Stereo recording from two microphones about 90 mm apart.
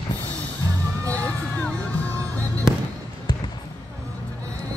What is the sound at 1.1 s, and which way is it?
Music, 15° left (ahead or behind).